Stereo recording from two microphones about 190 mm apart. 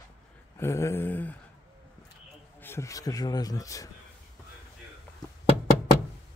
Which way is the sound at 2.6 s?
15° left (ahead or behind).